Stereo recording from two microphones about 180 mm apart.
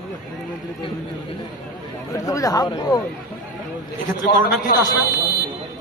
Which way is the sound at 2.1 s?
20° left (ahead or behind).